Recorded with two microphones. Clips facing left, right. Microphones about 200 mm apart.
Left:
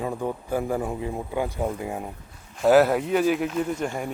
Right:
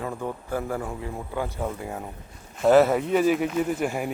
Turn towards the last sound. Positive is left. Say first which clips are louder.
# right 1 dB
turn(degrees=-10)  # may be behind; listen again after turning